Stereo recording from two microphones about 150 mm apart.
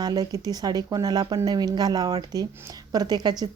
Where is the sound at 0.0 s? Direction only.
25° right (ahead or behind).